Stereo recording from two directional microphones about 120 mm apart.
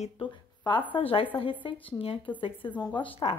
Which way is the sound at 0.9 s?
50° left (ahead or behind).